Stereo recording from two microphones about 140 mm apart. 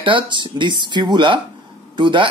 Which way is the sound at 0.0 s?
35° right (ahead or behind).